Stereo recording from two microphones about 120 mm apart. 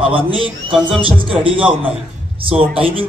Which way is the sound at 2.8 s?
50° right (ahead or behind).